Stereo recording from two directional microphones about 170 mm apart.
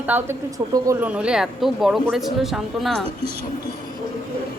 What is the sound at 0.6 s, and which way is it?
Speech, 25° right (ahead or behind).